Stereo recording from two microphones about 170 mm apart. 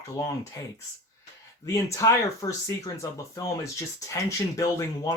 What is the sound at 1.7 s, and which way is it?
Speech, 20° left (ahead or behind).